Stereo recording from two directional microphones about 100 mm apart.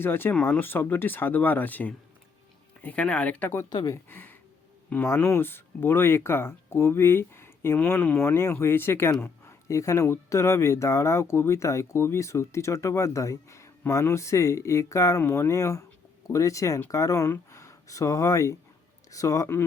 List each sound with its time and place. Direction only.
0.0 s speech: 20° left (ahead or behind)
7.9 s speech: 15° left (ahead or behind)
8.2 s speech: 25° left (ahead or behind)